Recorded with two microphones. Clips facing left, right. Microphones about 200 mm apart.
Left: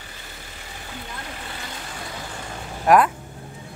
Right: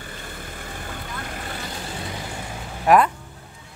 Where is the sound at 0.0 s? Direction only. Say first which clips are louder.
Right 6 dB; 50° right (ahead or behind).